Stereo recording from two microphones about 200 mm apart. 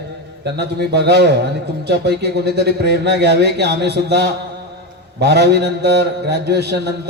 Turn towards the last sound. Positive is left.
turn(degrees=-55)  # may be behind; listen again after turning